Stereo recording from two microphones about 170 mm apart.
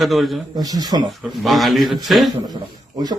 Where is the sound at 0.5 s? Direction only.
25° right (ahead or behind).